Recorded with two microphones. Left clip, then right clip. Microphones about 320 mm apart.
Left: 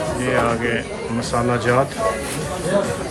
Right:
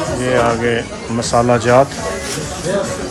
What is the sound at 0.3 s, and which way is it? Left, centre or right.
Speech, centre.